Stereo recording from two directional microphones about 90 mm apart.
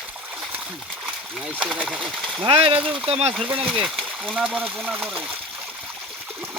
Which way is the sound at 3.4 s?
15° right (ahead or behind).